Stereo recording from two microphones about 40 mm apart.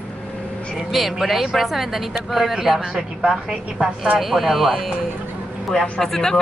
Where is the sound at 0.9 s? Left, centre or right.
Centre.